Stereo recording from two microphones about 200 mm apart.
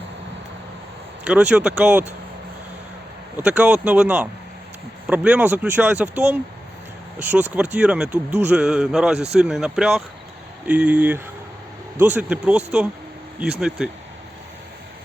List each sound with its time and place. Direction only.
1.3 s speech: 5° right (ahead or behind)
3.3 s speech: 10° right (ahead or behind)